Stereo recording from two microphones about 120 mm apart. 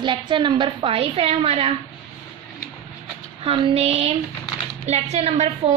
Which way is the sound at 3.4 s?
50° right (ahead or behind).